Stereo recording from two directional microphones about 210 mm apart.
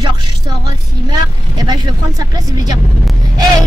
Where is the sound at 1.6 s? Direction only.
20° right (ahead or behind).